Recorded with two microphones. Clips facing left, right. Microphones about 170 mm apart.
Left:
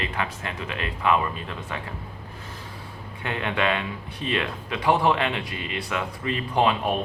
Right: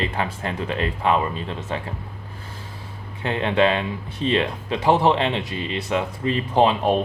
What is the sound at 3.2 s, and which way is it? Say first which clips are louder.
Speech: right 7 dB; 30° right (ahead or behind).